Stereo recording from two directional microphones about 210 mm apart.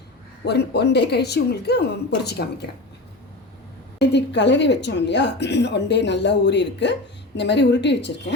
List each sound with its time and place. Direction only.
0.4 s a woman's voice: 50° left (ahead or behind)
3.9 s speech: 55° left (ahead or behind)